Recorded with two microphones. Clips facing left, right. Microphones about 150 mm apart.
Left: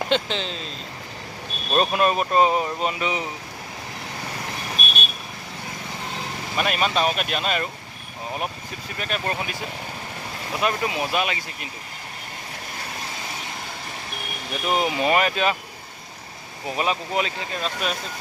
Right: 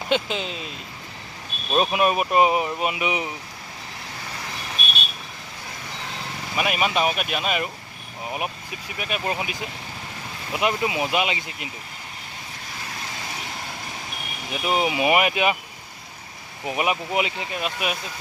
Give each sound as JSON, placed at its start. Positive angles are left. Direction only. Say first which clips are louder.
{"t": 0.1, "sound": "speech", "louder": "right 3 dB", "side_deg": -10}
{"t": 1.7, "sound": "speech", "louder": "even", "side_deg": -5}
{"t": 6.6, "sound": "speech", "louder": "even", "side_deg": -10}
{"t": 9.0, "sound": "speech", "louder": "even", "side_deg": -10}
{"t": 10.6, "sound": "speech", "louder": "right 1 dB", "side_deg": -15}
{"t": 14.5, "sound": "speech", "louder": "even", "side_deg": -5}
{"t": 16.6, "sound": "speech", "louder": "right 1 dB", "side_deg": -15}